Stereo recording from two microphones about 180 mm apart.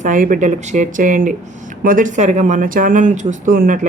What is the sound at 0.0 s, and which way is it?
Speech, 45° right (ahead or behind).